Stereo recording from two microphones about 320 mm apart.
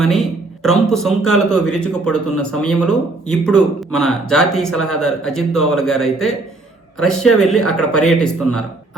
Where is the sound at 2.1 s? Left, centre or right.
Left.